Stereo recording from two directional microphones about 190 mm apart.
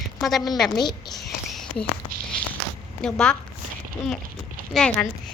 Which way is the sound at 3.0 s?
5° left (ahead or behind).